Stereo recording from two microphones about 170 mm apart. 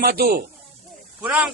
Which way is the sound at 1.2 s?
10° right (ahead or behind).